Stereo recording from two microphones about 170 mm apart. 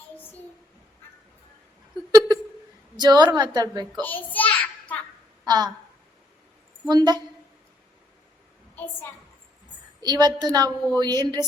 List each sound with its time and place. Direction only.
2.1 s a sound: 25° right (ahead or behind)
3.0 s a woman's voice: 25° right (ahead or behind)
4.0 s a sound: 10° left (ahead or behind)
5.5 s a woman's voice: 25° right (ahead or behind)
6.8 s a woman's voice: 25° right (ahead or behind)
10.0 s a woman's voice: 25° right (ahead or behind)